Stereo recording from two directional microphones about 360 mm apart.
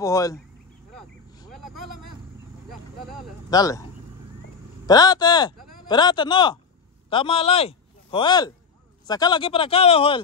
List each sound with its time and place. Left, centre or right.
0.0 s speech: centre
1.7 s vehicle: right
3.4 s speech: centre
4.8 s speech: centre
5.6 s a sound: right
5.9 s speech: centre